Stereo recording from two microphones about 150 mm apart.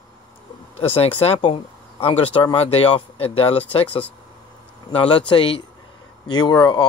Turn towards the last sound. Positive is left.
turn(degrees=30)  # may be behind; listen again after turning